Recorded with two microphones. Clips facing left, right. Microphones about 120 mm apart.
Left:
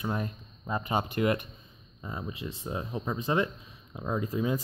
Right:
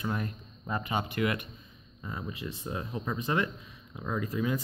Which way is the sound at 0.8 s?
30° left (ahead or behind).